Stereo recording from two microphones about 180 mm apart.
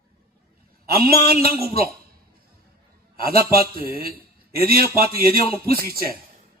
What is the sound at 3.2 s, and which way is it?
Speech, 55° right (ahead or behind).